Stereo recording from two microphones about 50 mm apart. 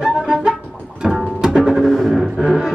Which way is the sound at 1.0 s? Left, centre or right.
Centre.